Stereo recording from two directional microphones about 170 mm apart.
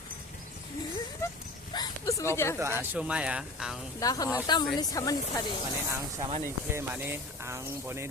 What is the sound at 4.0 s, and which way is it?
Speech, 20° left (ahead or behind).